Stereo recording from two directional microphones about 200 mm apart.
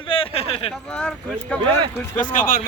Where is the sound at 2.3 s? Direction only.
40° left (ahead or behind).